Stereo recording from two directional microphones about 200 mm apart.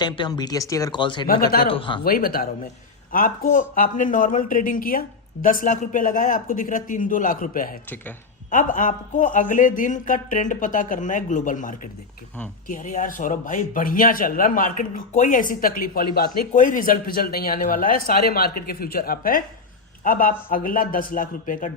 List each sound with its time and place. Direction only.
0.0 s speech: 20° left (ahead or behind)
2.0 s a man's voice: 45° left (ahead or behind)